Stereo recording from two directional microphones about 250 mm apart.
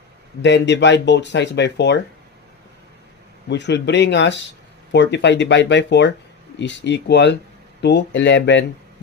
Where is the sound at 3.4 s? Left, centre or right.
Left.